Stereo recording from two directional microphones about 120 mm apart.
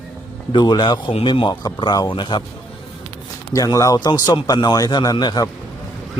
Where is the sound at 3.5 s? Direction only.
30° left (ahead or behind).